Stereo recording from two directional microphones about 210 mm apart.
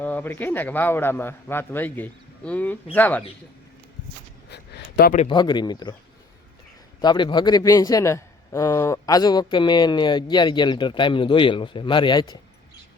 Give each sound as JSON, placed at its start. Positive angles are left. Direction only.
{"t": 0.0, "sound": "a man's voice", "side_deg": 10}
{"t": 4.4, "sound": "a sound", "side_deg": 50}
{"t": 5.1, "sound": "a man's voice", "side_deg": 25}
{"t": 7.0, "sound": "a man's voice", "side_deg": 20}